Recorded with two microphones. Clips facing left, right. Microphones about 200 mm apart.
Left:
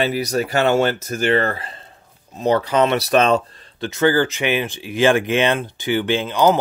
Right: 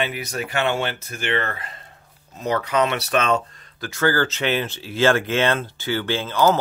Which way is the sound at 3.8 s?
20° left (ahead or behind).